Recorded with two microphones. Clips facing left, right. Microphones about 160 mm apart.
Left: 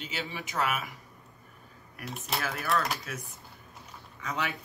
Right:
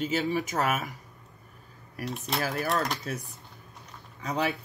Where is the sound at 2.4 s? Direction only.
40° right (ahead or behind).